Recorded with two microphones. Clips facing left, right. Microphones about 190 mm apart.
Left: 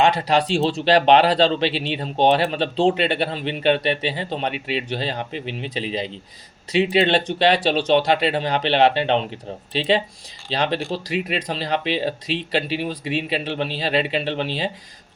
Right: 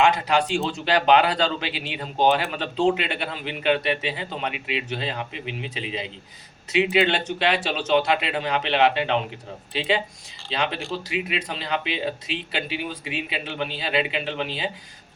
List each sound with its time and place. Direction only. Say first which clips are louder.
0.0 s speech: left 2 dB; 35° left (ahead or behind)